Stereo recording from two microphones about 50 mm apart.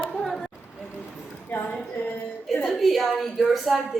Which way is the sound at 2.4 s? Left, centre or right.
Centre.